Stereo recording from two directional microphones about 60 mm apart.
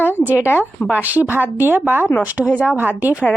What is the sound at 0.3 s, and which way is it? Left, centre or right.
A woman's voice, right.